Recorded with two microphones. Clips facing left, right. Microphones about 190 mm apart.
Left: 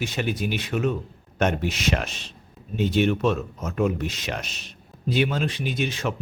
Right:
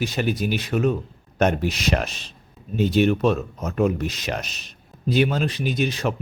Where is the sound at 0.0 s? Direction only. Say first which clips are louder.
Right 3 dB; 40° right (ahead or behind).